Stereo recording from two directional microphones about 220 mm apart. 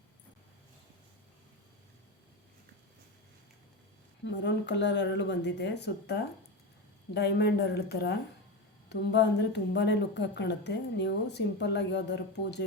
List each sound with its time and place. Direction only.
4.3 s a woman's voice: 55° left (ahead or behind)